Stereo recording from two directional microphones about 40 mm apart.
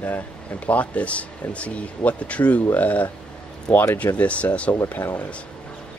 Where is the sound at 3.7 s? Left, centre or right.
Left.